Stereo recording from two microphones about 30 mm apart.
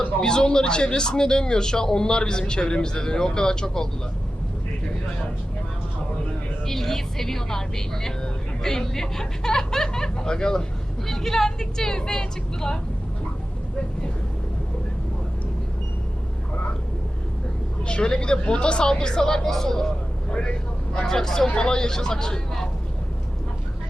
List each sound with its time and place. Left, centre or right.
0.2 s speech: left
6.7 s speech: centre
11.1 s speech: centre
17.8 s speech: left; by 19.6 s centre
20.3 s speech: left
21.5 s speech: left